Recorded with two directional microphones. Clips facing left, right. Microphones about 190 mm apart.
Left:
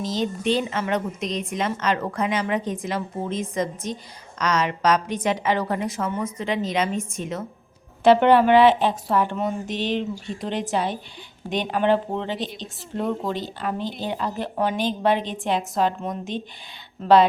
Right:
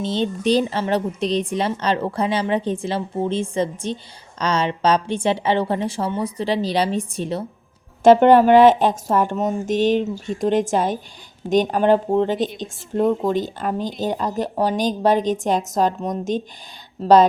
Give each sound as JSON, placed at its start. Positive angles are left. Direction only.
{"t": 0.0, "sound": "a woman's voice", "side_deg": -30}
{"t": 8.0, "sound": "a woman's voice", "side_deg": -45}